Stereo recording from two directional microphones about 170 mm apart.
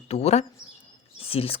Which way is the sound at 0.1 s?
40° left (ahead or behind).